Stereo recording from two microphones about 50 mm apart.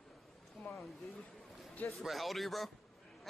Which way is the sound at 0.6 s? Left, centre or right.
Left.